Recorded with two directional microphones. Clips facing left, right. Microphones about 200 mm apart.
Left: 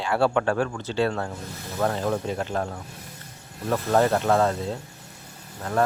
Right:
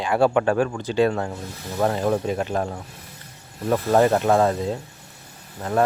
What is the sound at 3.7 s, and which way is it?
Speech, 15° right (ahead or behind).